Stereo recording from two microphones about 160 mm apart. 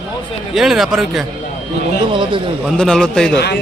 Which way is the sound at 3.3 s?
90° left.